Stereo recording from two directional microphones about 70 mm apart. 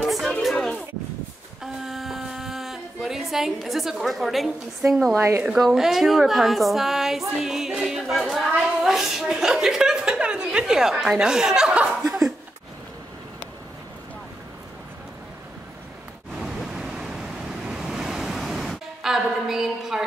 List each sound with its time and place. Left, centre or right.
0.0 s a sound: centre
5.1 s a woman's voice: right
5.4 s a woman's voice: centre
16.3 s pink noise: centre
16.7 s waves: centre